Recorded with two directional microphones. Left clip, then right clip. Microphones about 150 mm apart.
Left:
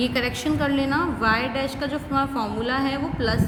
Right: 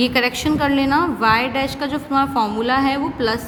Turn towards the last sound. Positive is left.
turn(degrees=-45)  # may be behind; listen again after turning